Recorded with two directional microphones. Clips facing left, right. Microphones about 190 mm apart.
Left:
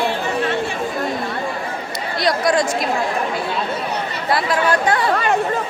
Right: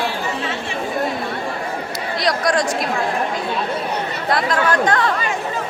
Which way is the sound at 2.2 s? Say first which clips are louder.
Left 2 dB; centre (ahead or behind).